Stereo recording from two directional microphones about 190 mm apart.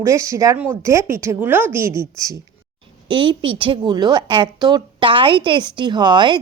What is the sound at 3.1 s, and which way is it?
A woman's voice, 25° right (ahead or behind).